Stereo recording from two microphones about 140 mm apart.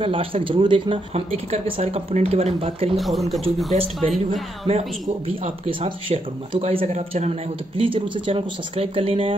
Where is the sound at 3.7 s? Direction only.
45° right (ahead or behind).